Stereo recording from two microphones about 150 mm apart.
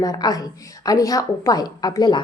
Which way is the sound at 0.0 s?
25° left (ahead or behind).